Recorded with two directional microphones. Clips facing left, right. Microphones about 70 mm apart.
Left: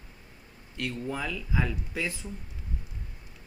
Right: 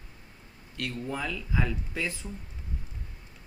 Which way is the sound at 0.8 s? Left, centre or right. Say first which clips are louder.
Left 1 dB; centre.